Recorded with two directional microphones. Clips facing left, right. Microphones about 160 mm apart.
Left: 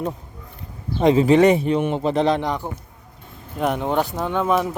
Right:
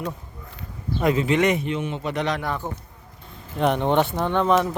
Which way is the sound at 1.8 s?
50° left (ahead or behind).